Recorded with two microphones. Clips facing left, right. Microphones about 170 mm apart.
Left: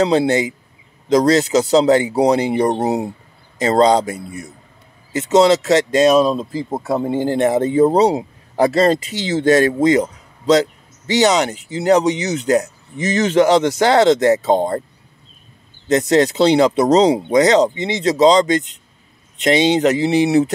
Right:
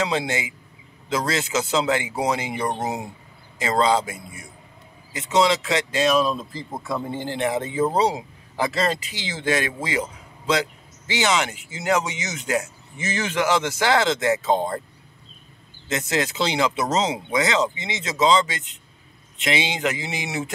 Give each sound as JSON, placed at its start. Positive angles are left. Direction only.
{"t": 0.0, "sound": "a man's voice", "side_deg": 35}
{"t": 6.8, "sound": "a man's voice", "side_deg": 50}
{"t": 15.9, "sound": "a man's voice", "side_deg": 40}